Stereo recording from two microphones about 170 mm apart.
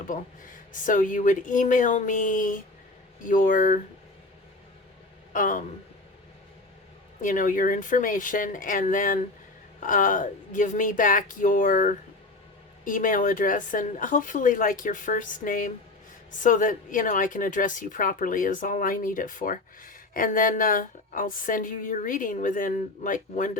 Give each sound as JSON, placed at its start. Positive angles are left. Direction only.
{"t": 0.1, "sound": "speech", "side_deg": 50}
{"t": 5.3, "sound": "speech", "side_deg": 50}
{"t": 7.2, "sound": "speech", "side_deg": 50}